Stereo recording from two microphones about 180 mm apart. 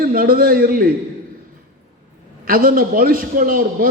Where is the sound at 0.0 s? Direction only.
55° right (ahead or behind).